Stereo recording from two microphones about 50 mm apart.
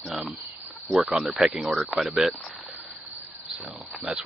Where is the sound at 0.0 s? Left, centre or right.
Centre.